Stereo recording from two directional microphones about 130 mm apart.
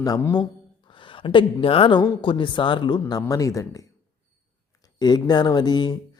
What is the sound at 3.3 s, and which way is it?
Speech, 25° left (ahead or behind).